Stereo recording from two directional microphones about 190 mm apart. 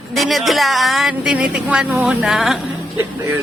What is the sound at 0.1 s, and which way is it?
Speech, centre (ahead or behind).